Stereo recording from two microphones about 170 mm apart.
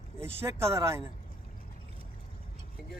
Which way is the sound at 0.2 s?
15° right (ahead or behind).